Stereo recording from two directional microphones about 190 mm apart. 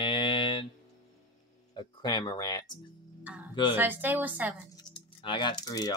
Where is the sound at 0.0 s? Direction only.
25° left (ahead or behind).